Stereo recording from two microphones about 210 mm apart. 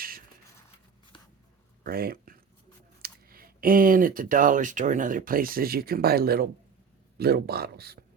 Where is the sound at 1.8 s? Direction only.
45° right (ahead or behind).